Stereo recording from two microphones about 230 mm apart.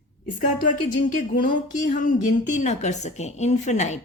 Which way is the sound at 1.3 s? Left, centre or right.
Left.